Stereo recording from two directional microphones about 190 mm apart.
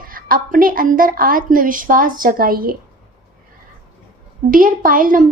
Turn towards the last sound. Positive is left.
turn(degrees=-45)  # may be behind; listen again after turning